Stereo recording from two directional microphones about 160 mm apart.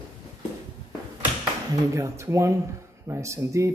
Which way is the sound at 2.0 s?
15° right (ahead or behind).